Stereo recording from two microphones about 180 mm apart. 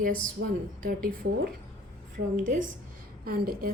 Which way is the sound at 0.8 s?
55° right (ahead or behind).